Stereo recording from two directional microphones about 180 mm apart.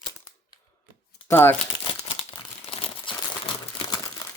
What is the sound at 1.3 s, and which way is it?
Speech, 10° left (ahead or behind).